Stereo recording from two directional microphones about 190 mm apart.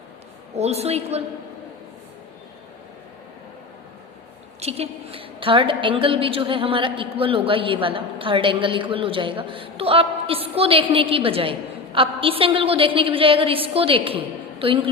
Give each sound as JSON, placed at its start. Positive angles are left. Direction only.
{"t": 0.5, "sound": "a woman's voice", "side_deg": -35}
{"t": 4.6, "sound": "a woman's voice", "side_deg": -30}